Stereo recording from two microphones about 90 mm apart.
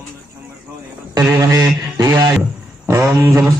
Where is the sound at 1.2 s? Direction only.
35° right (ahead or behind).